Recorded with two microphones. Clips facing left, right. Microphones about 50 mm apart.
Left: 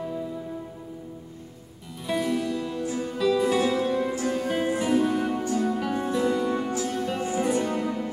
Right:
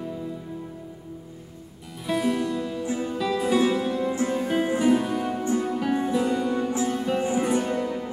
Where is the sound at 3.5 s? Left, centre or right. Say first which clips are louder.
Right 2 dB; centre.